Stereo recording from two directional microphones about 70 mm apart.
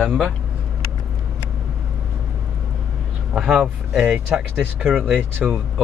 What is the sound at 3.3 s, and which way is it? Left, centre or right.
Speech, centre.